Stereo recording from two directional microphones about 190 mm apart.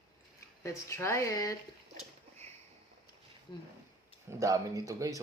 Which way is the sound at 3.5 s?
25° left (ahead or behind).